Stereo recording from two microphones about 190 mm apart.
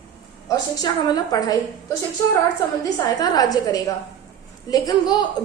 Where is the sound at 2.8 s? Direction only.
20° left (ahead or behind).